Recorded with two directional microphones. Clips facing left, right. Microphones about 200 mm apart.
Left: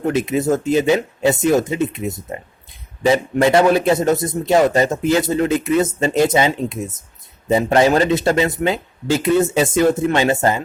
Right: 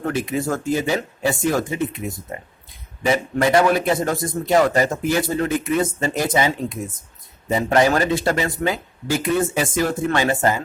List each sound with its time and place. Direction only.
0.0 s speech: 20° left (ahead or behind)